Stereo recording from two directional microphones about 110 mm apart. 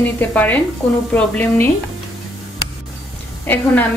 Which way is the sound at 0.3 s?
15° left (ahead or behind).